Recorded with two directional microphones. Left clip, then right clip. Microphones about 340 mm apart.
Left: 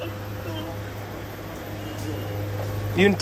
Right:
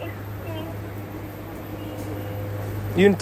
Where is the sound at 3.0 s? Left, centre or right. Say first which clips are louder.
Right 2 dB; centre.